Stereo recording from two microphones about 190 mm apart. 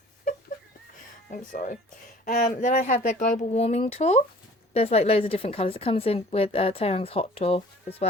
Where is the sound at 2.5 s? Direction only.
35° left (ahead or behind).